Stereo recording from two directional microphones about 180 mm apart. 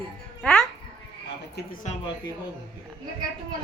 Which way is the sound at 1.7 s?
45° left (ahead or behind).